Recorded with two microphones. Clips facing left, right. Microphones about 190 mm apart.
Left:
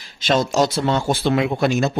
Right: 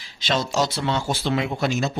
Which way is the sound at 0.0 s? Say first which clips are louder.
Left 6 dB; 50° left (ahead or behind).